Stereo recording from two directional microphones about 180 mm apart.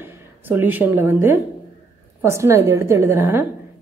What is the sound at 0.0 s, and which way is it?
A woman's voice, 10° right (ahead or behind).